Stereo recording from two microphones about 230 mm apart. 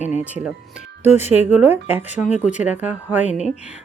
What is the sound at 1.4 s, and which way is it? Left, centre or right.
Speech, centre.